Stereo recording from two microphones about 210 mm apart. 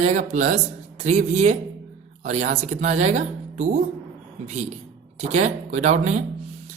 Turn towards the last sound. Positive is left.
turn(degrees=-35)  # may be behind; listen again after turning